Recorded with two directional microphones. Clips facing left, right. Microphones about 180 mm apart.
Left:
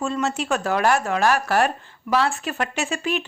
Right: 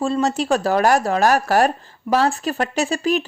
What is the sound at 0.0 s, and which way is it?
Speech, 35° right (ahead or behind).